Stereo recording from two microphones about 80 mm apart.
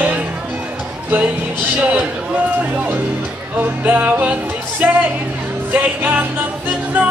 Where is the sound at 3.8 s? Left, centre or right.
Centre.